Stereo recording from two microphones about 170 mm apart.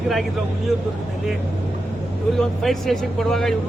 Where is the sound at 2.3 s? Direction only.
Centre (ahead or behind).